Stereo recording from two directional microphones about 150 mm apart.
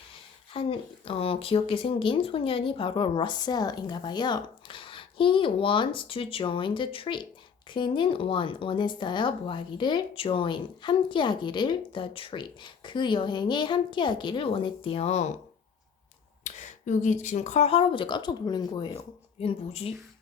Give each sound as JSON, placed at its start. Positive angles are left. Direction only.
{"t": 0.5, "sound": "speech", "side_deg": 35}
{"t": 16.4, "sound": "speech", "side_deg": 50}